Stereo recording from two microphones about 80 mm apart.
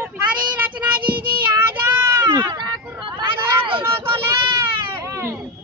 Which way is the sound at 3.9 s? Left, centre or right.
Right.